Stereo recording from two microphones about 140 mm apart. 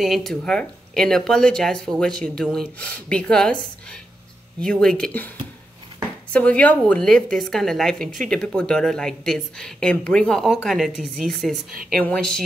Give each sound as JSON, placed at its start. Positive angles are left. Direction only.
{"t": 0.0, "sound": "a woman's voice", "side_deg": 0}
{"t": 4.6, "sound": "a woman's voice", "side_deg": 5}
{"t": 6.3, "sound": "a woman's voice", "side_deg": 10}